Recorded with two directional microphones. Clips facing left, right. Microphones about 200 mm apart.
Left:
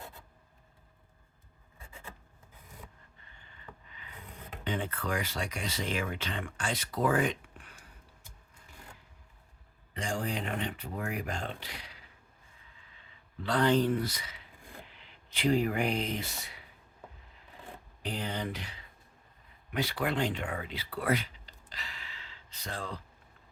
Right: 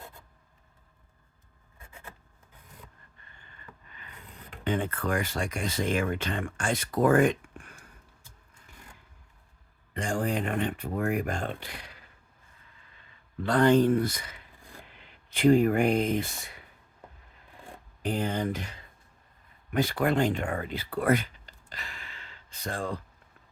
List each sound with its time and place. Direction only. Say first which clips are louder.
4.6 s speech: right 5 dB; 50° right (ahead or behind)
9.9 s speech: right 5 dB; 50° right (ahead or behind)
13.4 s speech: right 5 dB; 50° right (ahead or behind)
18.0 s speech: right 7 dB; 50° right (ahead or behind)